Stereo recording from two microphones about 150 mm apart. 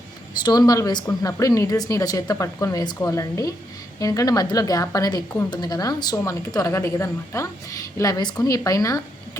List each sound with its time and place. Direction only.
0.4 s speech: 25° left (ahead or behind)